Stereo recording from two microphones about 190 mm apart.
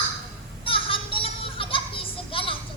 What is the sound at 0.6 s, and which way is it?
Children playing, 30° left (ahead or behind).